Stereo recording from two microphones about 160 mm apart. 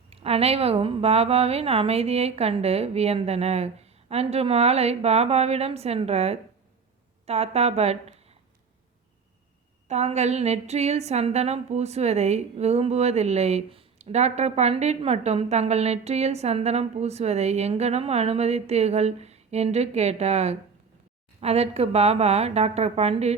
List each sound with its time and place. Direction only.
0.1 s a woman's voice: 40° right (ahead or behind)
9.9 s a woman's voice: 45° right (ahead or behind)